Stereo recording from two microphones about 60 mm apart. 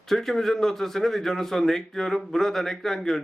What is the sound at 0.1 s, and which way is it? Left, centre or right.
Speech, centre.